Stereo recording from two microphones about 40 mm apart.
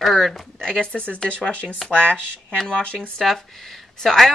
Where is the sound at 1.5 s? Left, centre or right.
Left.